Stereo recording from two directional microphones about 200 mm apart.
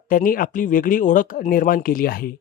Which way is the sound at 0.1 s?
45° left (ahead or behind).